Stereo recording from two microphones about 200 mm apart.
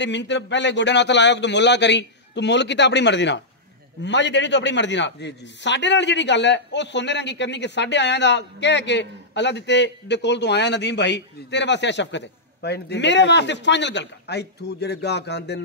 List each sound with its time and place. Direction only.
0.0 s speech: 60° left (ahead or behind)